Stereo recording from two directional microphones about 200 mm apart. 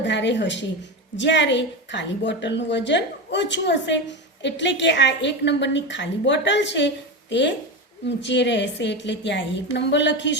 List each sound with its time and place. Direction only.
0.0 s a woman's voice: 60° left (ahead or behind)